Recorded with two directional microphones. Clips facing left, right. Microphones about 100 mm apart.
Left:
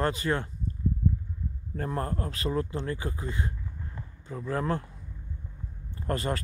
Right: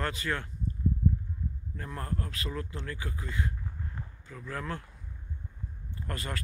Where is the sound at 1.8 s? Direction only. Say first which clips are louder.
Left 6 dB; 35° left (ahead or behind).